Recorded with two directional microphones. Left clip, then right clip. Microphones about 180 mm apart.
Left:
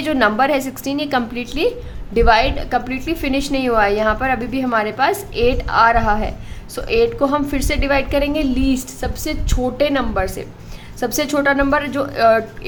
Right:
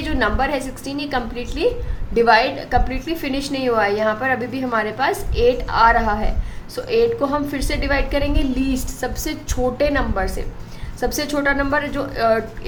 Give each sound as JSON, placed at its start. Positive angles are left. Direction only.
{"t": 0.0, "sound": "a woman's voice", "side_deg": 35}